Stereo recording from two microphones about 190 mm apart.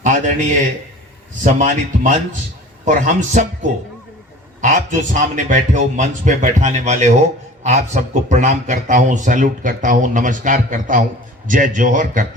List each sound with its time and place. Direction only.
0.0 s a sound: 40° right (ahead or behind)
1.5 s a man's voice: 40° right (ahead or behind)
4.6 s a man's voice: 40° right (ahead or behind)